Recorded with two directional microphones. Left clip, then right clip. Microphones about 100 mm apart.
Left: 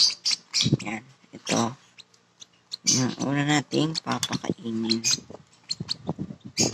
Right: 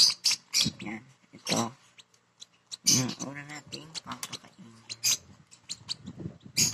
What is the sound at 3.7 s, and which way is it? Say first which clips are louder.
Speech: left 14 dB; 5° left (ahead or behind).